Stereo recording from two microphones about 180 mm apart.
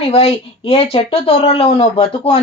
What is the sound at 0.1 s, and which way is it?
Speech, 35° left (ahead or behind).